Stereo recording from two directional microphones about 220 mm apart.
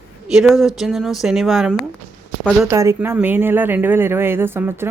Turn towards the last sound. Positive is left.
turn(degrees=-10)  # may be behind; listen again after turning